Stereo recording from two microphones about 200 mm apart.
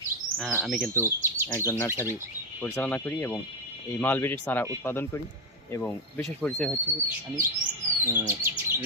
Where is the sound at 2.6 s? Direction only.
10° left (ahead or behind).